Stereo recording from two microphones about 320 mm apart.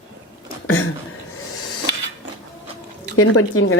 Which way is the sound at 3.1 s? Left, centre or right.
Left.